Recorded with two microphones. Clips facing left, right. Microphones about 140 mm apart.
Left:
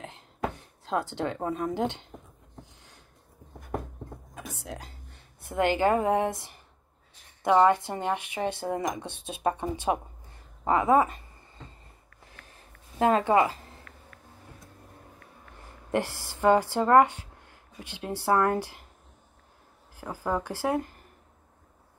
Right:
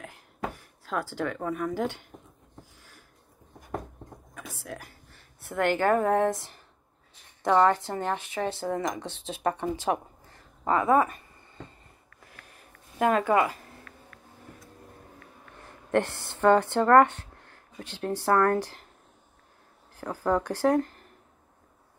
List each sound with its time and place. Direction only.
0.0 s a sound: 25° left (ahead or behind)
4.6 s a woman's voice: 20° left (ahead or behind)
10.6 s a sound: 20° left (ahead or behind)
13.0 s speech: 25° left (ahead or behind)
15.9 s speech: 10° left (ahead or behind)
20.2 s speech: 10° left (ahead or behind)